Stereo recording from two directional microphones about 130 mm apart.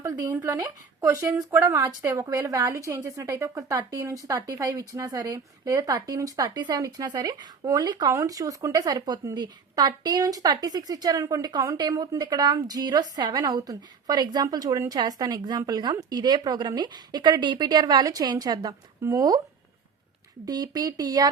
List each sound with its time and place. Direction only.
0.0 s a sound: 25° right (ahead or behind)
0.3 s a woman's voice: 20° right (ahead or behind)
20.4 s a woman's voice: 30° right (ahead or behind)